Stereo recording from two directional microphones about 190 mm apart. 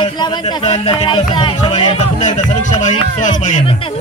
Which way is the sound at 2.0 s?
40° left (ahead or behind).